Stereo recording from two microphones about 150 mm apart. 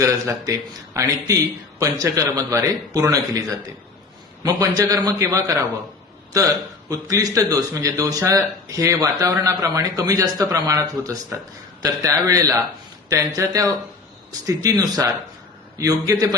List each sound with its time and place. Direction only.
0.0 s speech: 20° right (ahead or behind)
6.9 s speech: 25° right (ahead or behind)